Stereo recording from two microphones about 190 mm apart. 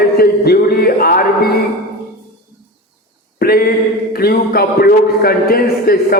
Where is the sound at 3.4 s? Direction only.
55° left (ahead or behind).